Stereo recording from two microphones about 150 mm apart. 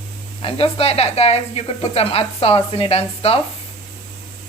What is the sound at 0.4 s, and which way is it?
Speech, 40° left (ahead or behind).